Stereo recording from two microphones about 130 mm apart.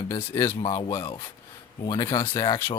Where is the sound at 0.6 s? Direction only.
40° left (ahead or behind).